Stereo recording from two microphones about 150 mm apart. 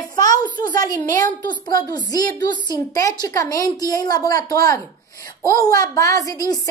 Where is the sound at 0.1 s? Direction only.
25° left (ahead or behind).